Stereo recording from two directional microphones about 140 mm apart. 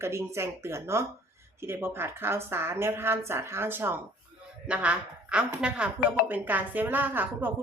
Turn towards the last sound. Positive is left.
turn(degrees=-15)  # may be behind; listen again after turning